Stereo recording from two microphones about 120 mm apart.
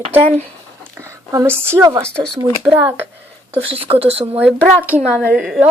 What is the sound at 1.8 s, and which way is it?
Speech, 30° right (ahead or behind).